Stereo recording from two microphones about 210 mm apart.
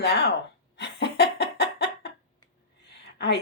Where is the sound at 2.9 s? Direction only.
55° left (ahead or behind).